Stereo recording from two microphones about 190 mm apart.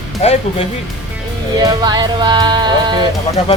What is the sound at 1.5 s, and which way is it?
A woman's voice, 20° right (ahead or behind).